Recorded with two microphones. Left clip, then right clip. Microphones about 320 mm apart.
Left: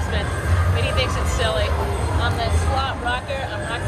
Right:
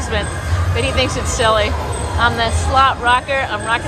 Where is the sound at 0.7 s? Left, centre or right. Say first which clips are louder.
Right 6 dB; centre.